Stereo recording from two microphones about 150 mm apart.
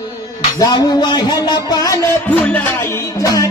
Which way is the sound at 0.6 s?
25° left (ahead or behind).